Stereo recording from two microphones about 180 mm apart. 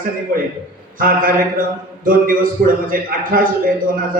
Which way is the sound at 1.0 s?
50° right (ahead or behind).